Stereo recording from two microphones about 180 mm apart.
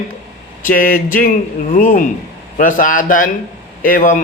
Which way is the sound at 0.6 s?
50° left (ahead or behind).